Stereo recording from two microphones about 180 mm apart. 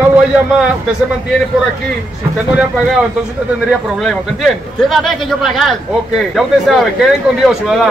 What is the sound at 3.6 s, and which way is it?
A man's voice, centre (ahead or behind).